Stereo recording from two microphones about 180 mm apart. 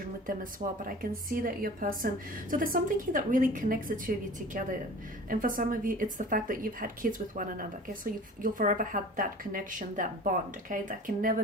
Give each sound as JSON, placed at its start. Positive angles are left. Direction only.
{"t": 0.9, "sound": "a woman's voice", "side_deg": -50}